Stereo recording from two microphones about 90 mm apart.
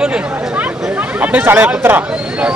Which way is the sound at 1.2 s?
20° right (ahead or behind).